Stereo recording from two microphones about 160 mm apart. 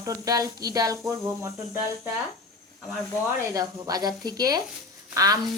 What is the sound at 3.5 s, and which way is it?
Speech, 25° right (ahead or behind).